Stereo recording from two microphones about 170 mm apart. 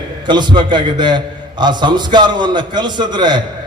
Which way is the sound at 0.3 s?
25° right (ahead or behind).